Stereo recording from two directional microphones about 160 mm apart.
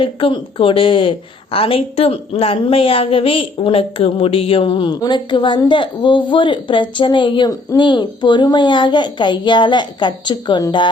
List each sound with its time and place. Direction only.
0.0 s a woman's voice: 35° left (ahead or behind)